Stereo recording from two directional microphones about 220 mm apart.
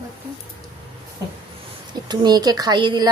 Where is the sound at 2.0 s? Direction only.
20° right (ahead or behind).